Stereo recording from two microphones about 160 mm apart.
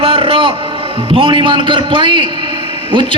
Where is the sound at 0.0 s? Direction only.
35° right (ahead or behind).